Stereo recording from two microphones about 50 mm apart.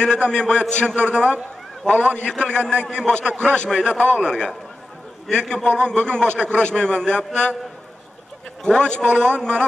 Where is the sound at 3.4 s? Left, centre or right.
Left.